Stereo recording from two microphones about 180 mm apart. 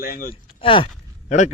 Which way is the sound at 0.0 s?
55° left (ahead or behind).